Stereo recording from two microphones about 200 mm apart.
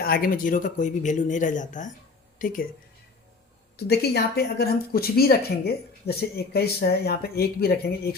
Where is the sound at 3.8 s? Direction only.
55° left (ahead or behind).